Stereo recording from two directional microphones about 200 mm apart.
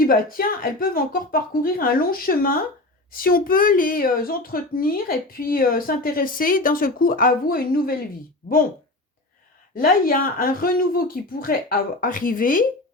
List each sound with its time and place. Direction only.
0.0 s speech: 45° left (ahead or behind)
9.7 s speech: 45° left (ahead or behind)